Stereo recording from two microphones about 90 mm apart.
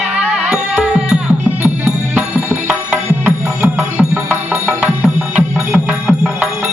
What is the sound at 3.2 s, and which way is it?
Music, 20° right (ahead or behind).